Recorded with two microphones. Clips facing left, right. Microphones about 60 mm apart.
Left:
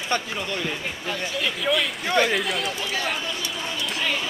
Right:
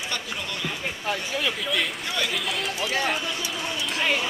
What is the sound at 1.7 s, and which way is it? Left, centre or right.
Speech, left.